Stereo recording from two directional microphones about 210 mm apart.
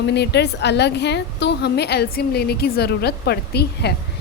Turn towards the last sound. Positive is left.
turn(degrees=50)  # may be behind; listen again after turning